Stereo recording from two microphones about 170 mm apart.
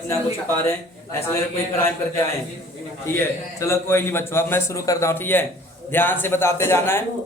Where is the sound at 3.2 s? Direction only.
15° left (ahead or behind).